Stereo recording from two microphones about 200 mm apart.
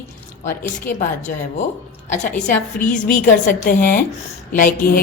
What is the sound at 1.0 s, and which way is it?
A woman's voice, 40° left (ahead or behind).